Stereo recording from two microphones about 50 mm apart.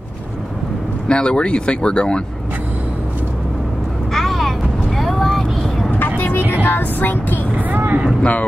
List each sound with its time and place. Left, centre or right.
1.0 s speech: centre
4.1 s vehicle: centre
5.9 s vehicle: left
6.5 s music: left
7.5 s vehicle: right
8.2 s speech: left